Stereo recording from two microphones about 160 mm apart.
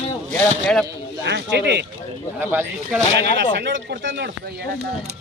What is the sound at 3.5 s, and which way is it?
Speech, 90° right.